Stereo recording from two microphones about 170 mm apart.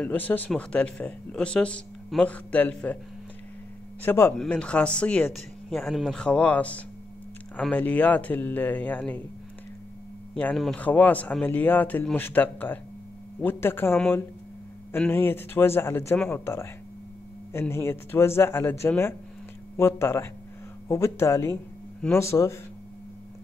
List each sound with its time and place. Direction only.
0.0 s speech: 10° left (ahead or behind)
4.0 s speech: 15° left (ahead or behind)
10.3 s speech: 5° left (ahead or behind)